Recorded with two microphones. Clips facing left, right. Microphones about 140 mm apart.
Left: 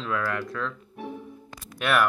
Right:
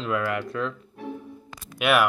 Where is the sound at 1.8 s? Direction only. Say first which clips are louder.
Right 2 dB; 10° right (ahead or behind).